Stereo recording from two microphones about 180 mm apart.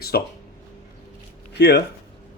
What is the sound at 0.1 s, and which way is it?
Speech, 60° left (ahead or behind).